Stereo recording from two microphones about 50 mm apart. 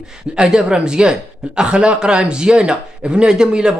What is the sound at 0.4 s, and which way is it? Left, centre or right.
Speech, centre.